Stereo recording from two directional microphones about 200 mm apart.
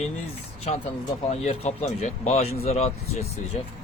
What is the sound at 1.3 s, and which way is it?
Speech, 35° left (ahead or behind).